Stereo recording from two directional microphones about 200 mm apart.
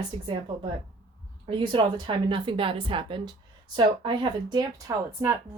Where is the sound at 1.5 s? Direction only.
25° right (ahead or behind).